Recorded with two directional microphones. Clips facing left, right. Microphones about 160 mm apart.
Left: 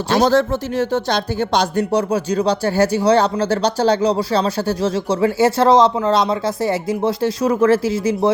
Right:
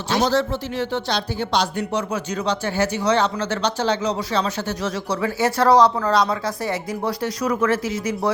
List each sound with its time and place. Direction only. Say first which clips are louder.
0.1 s speech: left 5 dB; 50° left (ahead or behind); by 8.3 s 30° left (ahead or behind)